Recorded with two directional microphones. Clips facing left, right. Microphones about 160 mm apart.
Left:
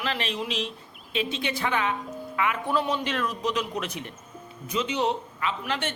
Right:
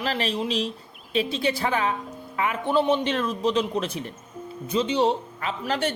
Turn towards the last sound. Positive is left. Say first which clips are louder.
# right 3 dB
turn(degrees=-40)  # may be behind; listen again after turning